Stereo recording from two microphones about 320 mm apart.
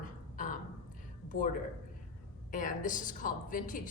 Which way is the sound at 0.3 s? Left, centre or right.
Left.